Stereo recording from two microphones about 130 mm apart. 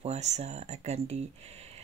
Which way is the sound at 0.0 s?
60° right (ahead or behind).